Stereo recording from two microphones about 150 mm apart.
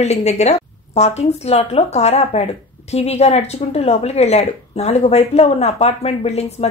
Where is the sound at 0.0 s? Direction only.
45° left (ahead or behind).